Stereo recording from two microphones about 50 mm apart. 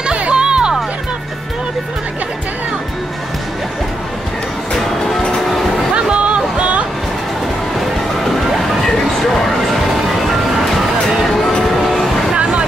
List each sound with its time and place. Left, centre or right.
0.0 s music: right
4.7 s music: centre
5.9 s music: right
8.8 s a sound: centre
11.9 s music: centre
12.4 s vehicle: right